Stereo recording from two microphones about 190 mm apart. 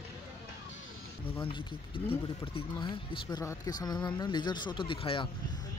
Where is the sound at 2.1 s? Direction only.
25° left (ahead or behind).